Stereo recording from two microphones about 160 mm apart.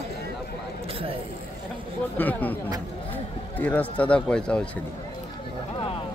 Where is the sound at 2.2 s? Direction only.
10° left (ahead or behind).